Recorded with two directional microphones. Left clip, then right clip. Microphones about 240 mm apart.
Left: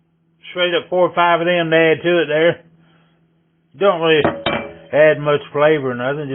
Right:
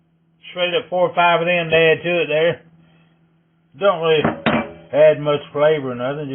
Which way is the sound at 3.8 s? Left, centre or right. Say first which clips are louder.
Left 2 dB; left.